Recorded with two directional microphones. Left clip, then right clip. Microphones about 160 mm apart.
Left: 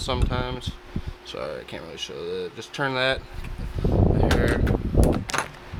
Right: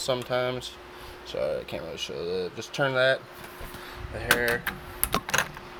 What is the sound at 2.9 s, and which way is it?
Speech, 30° left (ahead or behind).